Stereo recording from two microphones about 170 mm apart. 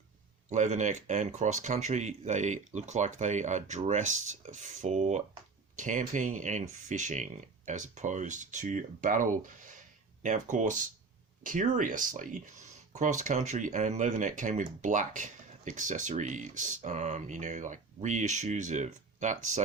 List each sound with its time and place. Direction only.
0.5 s speech: 45° right (ahead or behind)